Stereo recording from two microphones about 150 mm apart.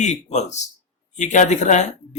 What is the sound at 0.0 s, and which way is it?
A man's voice, 50° left (ahead or behind).